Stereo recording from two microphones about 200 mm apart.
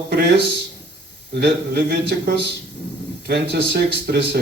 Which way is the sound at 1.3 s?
55° right (ahead or behind).